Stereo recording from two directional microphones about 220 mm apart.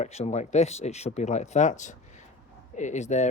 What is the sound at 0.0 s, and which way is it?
Speech, 30° left (ahead or behind).